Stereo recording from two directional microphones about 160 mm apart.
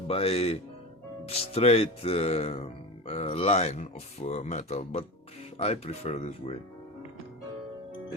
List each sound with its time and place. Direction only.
0.1 s speech: 40° left (ahead or behind)